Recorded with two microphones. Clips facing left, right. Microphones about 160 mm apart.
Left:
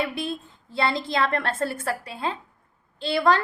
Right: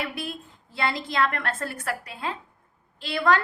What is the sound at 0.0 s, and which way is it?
A woman's voice, 25° left (ahead or behind).